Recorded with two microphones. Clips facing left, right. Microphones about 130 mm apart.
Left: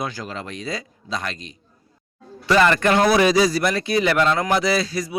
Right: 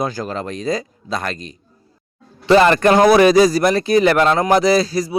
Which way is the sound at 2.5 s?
35° right (ahead or behind).